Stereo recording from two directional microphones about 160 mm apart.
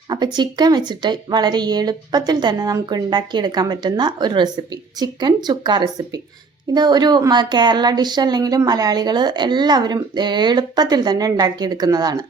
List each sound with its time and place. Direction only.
0.3 s speech: 25° right (ahead or behind)